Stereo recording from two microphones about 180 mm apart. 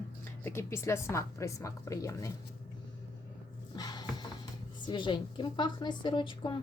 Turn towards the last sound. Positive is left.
turn(degrees=30)  # may be behind; listen again after turning